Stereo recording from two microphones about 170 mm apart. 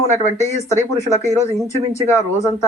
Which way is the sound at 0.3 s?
15° left (ahead or behind).